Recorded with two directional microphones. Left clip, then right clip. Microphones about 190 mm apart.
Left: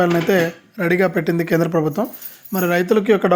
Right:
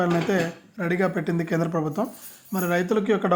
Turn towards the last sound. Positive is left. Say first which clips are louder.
# left 7 dB
turn(degrees=20)  # may be behind; listen again after turning